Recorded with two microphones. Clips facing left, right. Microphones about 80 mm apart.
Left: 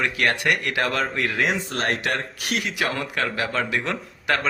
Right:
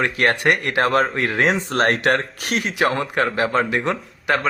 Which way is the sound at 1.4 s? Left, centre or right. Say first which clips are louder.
Right 8 dB; right.